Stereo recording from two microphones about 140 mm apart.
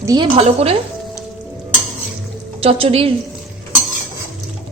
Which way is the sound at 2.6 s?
45° right (ahead or behind).